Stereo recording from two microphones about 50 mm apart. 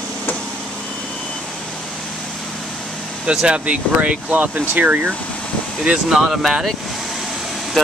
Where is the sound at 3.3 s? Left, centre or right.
Centre.